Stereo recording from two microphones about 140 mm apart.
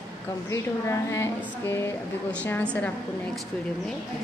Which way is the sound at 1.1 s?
20° left (ahead or behind).